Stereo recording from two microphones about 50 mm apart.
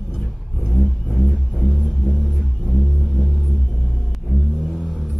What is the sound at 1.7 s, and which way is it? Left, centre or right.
Music, centre.